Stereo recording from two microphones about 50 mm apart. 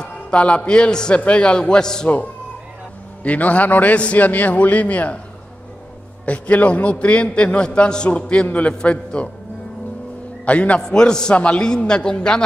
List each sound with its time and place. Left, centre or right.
0.0 s music: left
0.6 s a man's voice: centre
3.3 s a man's voice: left
6.2 s a man's voice: left
10.4 s a man's voice: left
10.8 s a man's voice: centre